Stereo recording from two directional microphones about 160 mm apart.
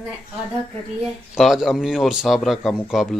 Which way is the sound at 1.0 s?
Centre (ahead or behind).